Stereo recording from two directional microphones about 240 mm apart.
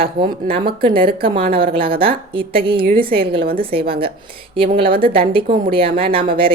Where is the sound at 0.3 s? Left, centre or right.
Right.